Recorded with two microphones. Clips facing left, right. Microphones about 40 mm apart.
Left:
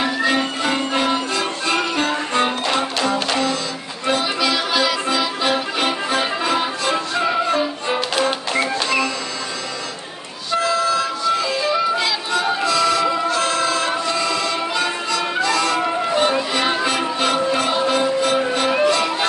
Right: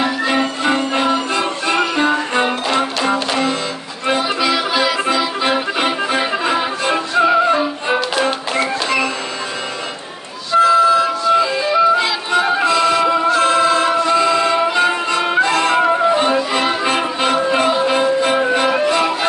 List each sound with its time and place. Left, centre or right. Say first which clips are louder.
0.0 s music: right 2 dB; centre
2.7 s music: right 3 dB; centre
4.2 s music: right 3 dB; centre
8.2 s music: right 2 dB; centre
10.6 s music: right 8 dB; right
16.1 s music: right 3 dB; right